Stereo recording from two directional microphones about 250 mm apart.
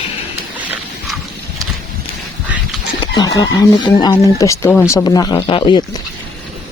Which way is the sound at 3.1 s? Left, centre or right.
Centre.